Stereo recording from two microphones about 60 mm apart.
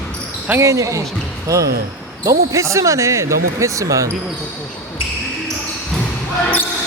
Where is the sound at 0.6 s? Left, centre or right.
Right.